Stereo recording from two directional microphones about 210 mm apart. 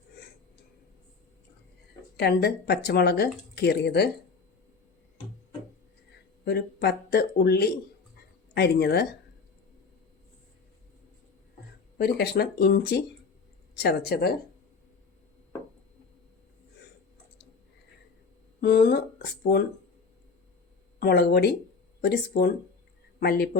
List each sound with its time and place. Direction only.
2.1 s speech: 50° left (ahead or behind)
6.4 s speech: 50° left (ahead or behind)
11.9 s speech: 50° left (ahead or behind)
18.6 s speech: 50° left (ahead or behind)
21.0 s speech: 45° left (ahead or behind)